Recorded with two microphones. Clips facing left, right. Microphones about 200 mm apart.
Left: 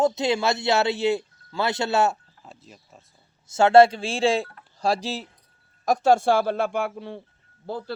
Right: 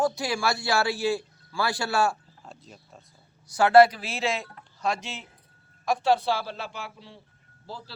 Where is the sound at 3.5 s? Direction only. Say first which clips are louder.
Left 2 dB; 25° left (ahead or behind).